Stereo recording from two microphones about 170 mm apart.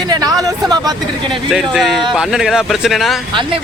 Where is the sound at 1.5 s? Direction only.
Centre (ahead or behind).